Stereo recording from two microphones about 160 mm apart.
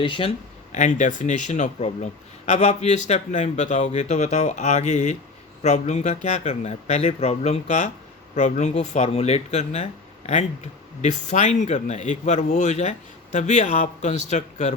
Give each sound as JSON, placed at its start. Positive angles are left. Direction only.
{"t": 0.0, "sound": "speech", "side_deg": 35}